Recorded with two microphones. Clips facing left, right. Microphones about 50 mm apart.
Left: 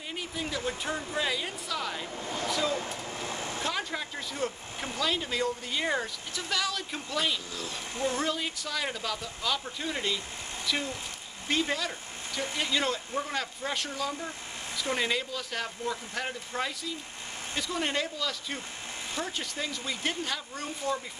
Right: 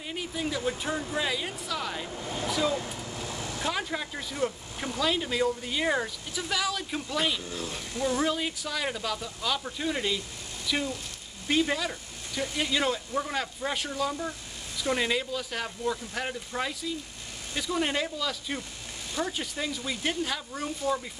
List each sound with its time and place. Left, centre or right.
0.1 s speech: centre
3.1 s vehicle: left
3.6 s speech: centre
7.5 s speech: right
7.9 s speech: left
8.2 s speech: centre